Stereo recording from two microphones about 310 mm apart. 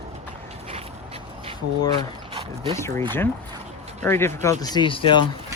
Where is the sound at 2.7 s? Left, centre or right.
Centre.